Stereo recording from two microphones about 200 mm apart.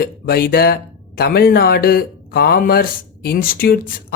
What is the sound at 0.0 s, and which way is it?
Speech, 50° left (ahead or behind).